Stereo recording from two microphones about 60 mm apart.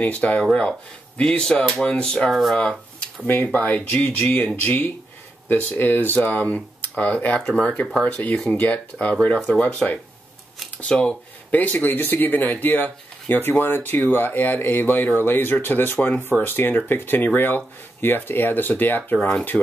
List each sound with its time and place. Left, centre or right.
0.0 s speech: left
0.4 s speech: centre
3.5 s speech: left
7.4 s speech: centre
8.0 s speech: left
19.1 s speech: centre